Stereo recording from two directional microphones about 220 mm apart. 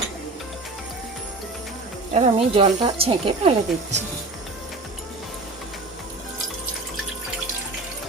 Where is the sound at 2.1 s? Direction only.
25° right (ahead or behind).